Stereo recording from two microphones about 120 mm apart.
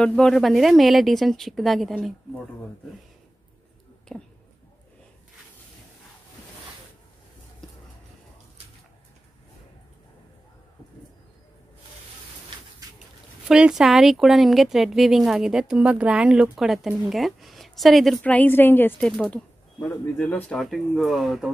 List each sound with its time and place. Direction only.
0.0 s speech: 5° left (ahead or behind)
4.1 s a woman's voice: 10° left (ahead or behind)
13.5 s speech: 5° right (ahead or behind)
18.2 s a woman's voice: 10° left (ahead or behind)
18.9 s a woman's voice: 5° left (ahead or behind)
20.5 s speech: centre (ahead or behind)